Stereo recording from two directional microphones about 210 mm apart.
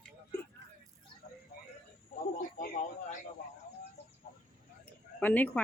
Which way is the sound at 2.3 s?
40° left (ahead or behind).